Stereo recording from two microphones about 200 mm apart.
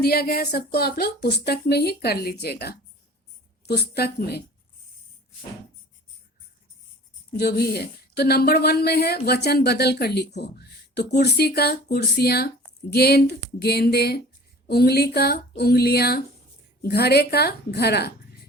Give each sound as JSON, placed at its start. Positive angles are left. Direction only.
{"t": 0.0, "sound": "a woman's voice", "side_deg": 50}
{"t": 7.3, "sound": "a woman's voice", "side_deg": 55}